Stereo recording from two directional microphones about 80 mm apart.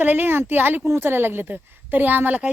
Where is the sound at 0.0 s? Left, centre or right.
Right.